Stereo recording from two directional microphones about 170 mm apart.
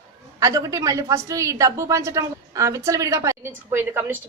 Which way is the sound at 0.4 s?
20° right (ahead or behind).